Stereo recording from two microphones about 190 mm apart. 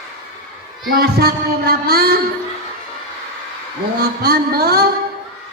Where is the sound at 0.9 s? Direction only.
55° right (ahead or behind).